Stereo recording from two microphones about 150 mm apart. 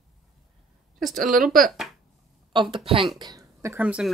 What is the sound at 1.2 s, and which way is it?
Speech, 65° right (ahead or behind).